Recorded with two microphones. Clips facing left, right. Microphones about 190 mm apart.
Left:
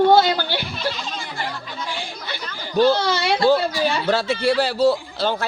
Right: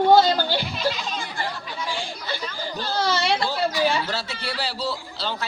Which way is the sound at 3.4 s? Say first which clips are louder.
Left 6 dB; 55° left (ahead or behind).